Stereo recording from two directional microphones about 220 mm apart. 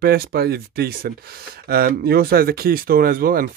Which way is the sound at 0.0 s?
45° right (ahead or behind).